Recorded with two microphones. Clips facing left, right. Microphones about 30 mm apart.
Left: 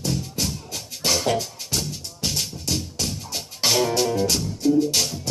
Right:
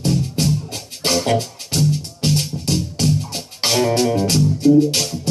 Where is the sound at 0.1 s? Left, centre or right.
Centre.